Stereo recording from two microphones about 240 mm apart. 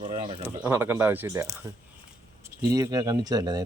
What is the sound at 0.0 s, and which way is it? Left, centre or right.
Bird, right.